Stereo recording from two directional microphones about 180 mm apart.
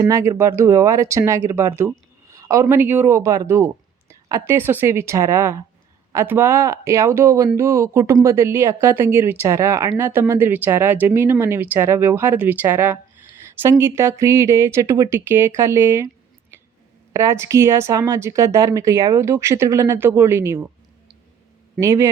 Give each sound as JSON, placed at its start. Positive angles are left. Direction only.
{"t": 0.0, "sound": "speech", "side_deg": -15}
{"t": 17.1, "sound": "speech", "side_deg": -15}
{"t": 21.8, "sound": "speech", "side_deg": -15}